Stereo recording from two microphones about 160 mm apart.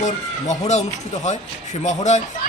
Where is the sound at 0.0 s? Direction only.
50° left (ahead or behind).